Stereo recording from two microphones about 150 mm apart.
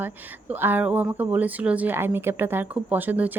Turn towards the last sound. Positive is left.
turn(degrees=-10)  # may be behind; listen again after turning